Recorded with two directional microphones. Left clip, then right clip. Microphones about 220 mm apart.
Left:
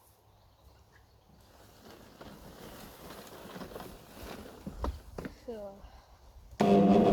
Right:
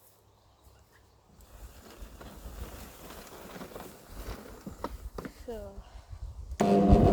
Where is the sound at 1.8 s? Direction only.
30° right (ahead or behind).